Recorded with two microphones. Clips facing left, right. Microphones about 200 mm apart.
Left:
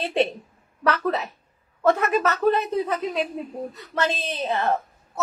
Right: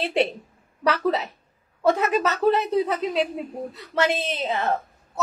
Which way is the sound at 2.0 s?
15° right (ahead or behind).